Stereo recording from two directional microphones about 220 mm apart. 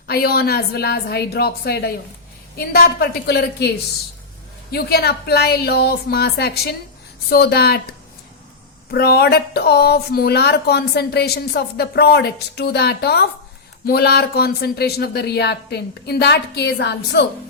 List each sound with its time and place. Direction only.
0.1 s speech: 45° left (ahead or behind)
4.7 s speech: 45° left (ahead or behind)
8.9 s speech: 45° left (ahead or behind)